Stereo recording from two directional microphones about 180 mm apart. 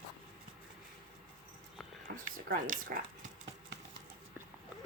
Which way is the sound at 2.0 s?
50° right (ahead or behind).